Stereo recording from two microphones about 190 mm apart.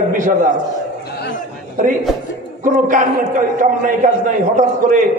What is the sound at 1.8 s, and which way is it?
A man's voice, 45° right (ahead or behind).